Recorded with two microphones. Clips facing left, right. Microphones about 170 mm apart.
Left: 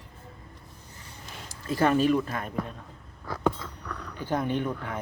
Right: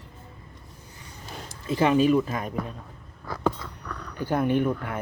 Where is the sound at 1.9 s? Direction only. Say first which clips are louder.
Right 3 dB; 5° right (ahead or behind).